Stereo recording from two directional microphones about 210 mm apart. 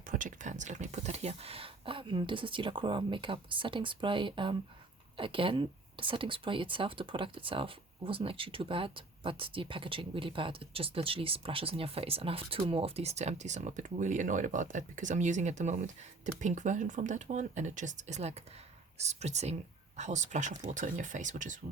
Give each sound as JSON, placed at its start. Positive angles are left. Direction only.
{"t": 0.1, "sound": "speech", "side_deg": -40}